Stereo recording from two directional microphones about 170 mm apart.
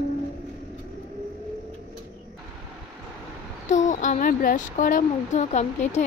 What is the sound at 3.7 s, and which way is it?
Speech, 45° left (ahead or behind).